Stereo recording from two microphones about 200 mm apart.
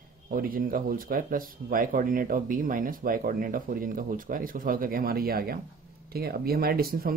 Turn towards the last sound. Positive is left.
turn(degrees=-50)  # may be behind; listen again after turning